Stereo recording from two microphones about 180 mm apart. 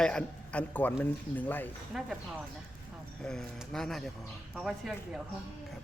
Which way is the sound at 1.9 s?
Centre (ahead or behind).